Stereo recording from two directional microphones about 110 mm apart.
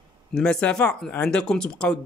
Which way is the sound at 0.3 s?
5° left (ahead or behind).